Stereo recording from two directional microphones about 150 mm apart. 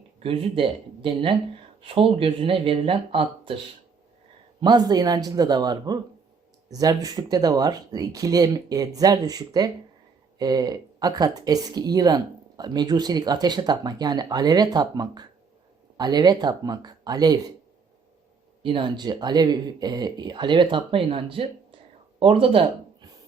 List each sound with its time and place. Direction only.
0.2 s speech: 35° right (ahead or behind)
4.6 s speech: 30° right (ahead or behind)
18.6 s speech: 35° right (ahead or behind)